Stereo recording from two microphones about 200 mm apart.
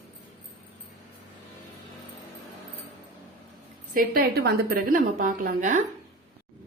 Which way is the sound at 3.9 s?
45° right (ahead or behind).